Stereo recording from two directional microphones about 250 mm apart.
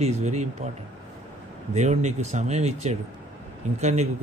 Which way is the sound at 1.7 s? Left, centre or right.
Right.